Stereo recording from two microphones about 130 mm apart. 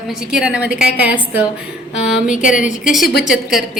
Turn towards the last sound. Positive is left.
turn(degrees=0)  # may be behind; listen again after turning